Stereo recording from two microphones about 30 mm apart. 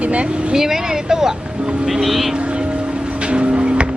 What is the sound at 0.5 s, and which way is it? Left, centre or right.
Speech, centre.